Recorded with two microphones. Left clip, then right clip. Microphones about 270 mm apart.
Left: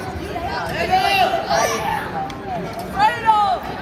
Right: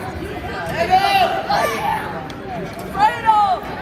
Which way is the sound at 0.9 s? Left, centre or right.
Right.